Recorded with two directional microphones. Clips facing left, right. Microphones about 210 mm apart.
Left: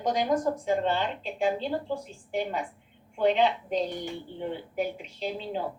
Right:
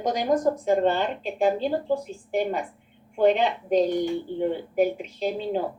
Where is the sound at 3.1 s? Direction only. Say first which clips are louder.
Right 3 dB; 45° right (ahead or behind).